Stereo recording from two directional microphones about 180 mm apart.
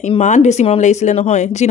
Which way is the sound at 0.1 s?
40° left (ahead or behind).